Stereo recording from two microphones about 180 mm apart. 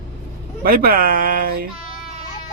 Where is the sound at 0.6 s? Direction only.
50° right (ahead or behind).